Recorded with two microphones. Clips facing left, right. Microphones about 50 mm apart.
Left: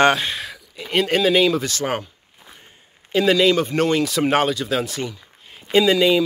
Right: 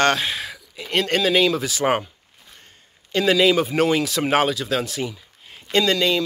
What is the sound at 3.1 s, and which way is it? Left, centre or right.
Speech, centre.